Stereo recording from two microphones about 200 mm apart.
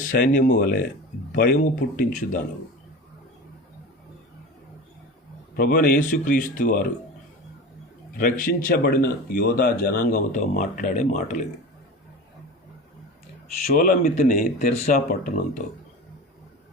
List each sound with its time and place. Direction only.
0.0 s speech: 40° left (ahead or behind)
5.5 s speech: 50° left (ahead or behind)
8.2 s speech: 45° left (ahead or behind)
13.7 s speech: 40° left (ahead or behind)